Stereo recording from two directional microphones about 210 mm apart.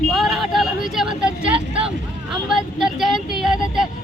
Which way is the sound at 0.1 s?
Centre (ahead or behind).